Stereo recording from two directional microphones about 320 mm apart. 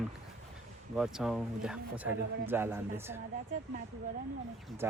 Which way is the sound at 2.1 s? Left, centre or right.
Right.